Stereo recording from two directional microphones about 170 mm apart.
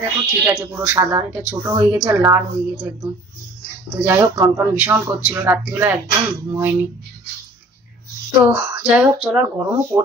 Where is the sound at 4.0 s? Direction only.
15° right (ahead or behind).